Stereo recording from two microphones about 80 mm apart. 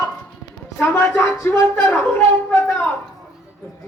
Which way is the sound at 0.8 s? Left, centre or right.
Left.